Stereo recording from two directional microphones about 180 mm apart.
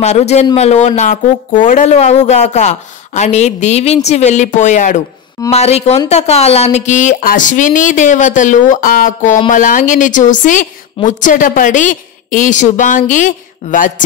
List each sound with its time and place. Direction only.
0.0 s speech: 40° left (ahead or behind)